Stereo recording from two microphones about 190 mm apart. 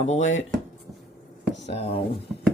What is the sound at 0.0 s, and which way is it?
Speech, 40° left (ahead or behind).